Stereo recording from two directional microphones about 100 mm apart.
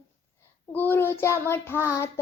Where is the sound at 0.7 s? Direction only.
20° left (ahead or behind).